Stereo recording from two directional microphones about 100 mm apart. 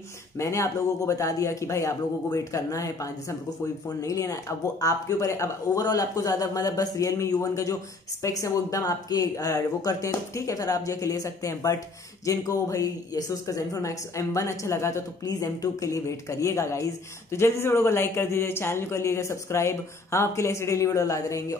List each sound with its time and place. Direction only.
0.4 s a woman's voice: 30° left (ahead or behind)